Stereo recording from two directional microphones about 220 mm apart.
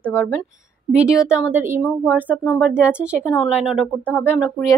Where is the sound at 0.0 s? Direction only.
5° left (ahead or behind).